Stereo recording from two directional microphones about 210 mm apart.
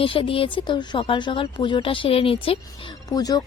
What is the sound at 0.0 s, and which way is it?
A woman's voice, 25° left (ahead or behind).